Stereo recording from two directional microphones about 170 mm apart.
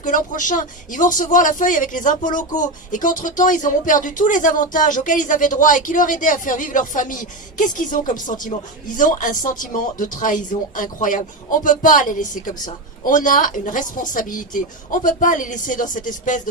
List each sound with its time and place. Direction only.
0.0 s speech: 50° left (ahead or behind)